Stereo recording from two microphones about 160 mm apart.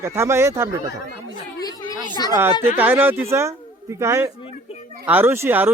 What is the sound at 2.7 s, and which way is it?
Speech, 10° right (ahead or behind).